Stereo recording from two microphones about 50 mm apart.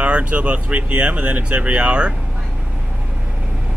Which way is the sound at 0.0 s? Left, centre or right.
Right.